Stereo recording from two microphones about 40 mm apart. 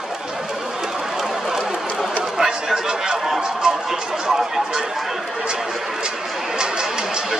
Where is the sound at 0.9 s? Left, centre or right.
Centre.